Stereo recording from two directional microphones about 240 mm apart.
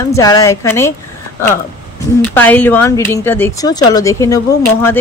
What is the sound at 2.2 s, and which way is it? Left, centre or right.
A woman's voice, centre.